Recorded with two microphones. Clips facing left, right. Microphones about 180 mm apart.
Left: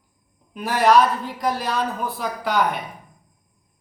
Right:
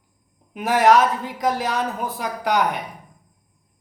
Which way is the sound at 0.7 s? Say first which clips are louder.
Right 1 dB; 15° right (ahead or behind).